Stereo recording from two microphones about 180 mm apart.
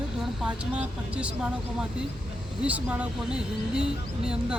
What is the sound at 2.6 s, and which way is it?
Speech, 10° right (ahead or behind).